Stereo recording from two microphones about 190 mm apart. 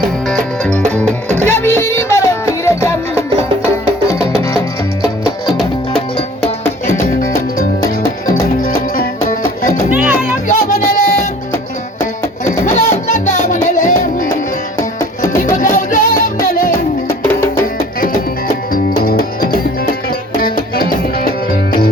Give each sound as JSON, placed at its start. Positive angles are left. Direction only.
{"t": 0.3, "sound": "music", "side_deg": 5}
{"t": 4.1, "sound": "music", "side_deg": 15}
{"t": 7.2, "sound": "music", "side_deg": 45}
{"t": 9.9, "sound": "music", "side_deg": -10}
{"t": 10.5, "sound": "music", "side_deg": 45}
{"t": 12.5, "sound": "music", "side_deg": 40}
{"t": 15.5, "sound": "music", "side_deg": 45}
{"t": 17.2, "sound": "music", "side_deg": 10}
{"t": 18.7, "sound": "music", "side_deg": 50}